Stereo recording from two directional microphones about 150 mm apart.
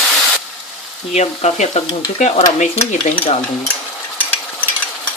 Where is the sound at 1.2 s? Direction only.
50° left (ahead or behind).